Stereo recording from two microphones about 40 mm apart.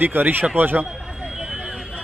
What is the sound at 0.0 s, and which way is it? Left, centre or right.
Speech, right.